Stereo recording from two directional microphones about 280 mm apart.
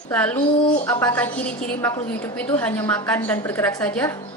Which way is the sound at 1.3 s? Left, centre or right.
Left.